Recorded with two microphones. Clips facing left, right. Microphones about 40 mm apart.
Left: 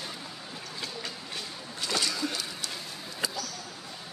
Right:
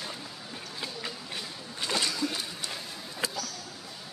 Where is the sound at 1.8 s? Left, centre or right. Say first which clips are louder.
Right 1 dB; right.